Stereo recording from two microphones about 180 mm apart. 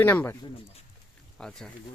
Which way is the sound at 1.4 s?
5° left (ahead or behind).